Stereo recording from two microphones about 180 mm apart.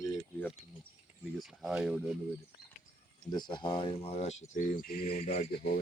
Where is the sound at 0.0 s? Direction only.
10° left (ahead or behind).